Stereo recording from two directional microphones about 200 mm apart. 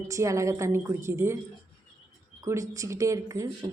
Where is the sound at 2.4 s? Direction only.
15° right (ahead or behind).